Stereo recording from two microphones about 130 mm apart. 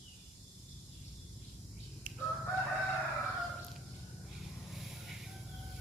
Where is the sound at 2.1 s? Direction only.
90° right.